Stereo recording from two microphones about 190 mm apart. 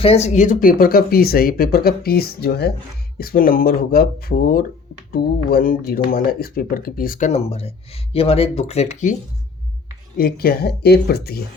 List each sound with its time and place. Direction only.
0.0 s speech: 35° left (ahead or behind)
10.2 s speech: 50° left (ahead or behind)